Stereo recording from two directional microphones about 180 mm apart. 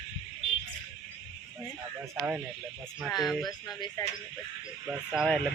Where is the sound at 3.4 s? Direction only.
20° left (ahead or behind).